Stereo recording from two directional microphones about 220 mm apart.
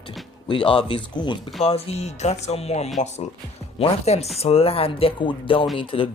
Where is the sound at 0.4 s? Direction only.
25° left (ahead or behind).